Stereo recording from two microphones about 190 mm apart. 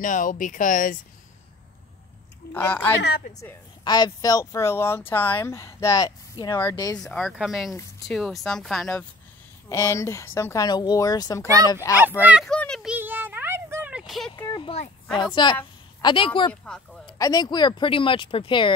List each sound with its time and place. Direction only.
0.0 s speech: 45° left (ahead or behind)
2.5 s speech: 10° left (ahead or behind)
3.0 s a woman's voice: 60° left (ahead or behind)
3.8 s speech: 20° left (ahead or behind)
7.0 s speech: centre (ahead or behind)
9.7 s speech: 15° left (ahead or behind)
11.4 s speech: 20° right (ahead or behind)
12.3 s speech: 5° right (ahead or behind)
12.5 s a sound: 5° left (ahead or behind)
12.9 s a sound: 10° right (ahead or behind)
14.3 s a sound: 25° left (ahead or behind)
15.4 s speech: 25° left (ahead or behind)
16.6 s speech: 5° left (ahead or behind)
17.0 s speech: 20° left (ahead or behind)